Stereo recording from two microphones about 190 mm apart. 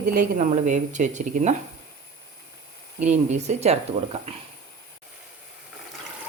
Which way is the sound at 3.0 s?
35° right (ahead or behind).